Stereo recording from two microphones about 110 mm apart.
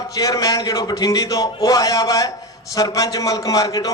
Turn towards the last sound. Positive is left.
turn(degrees=35)  # may be behind; listen again after turning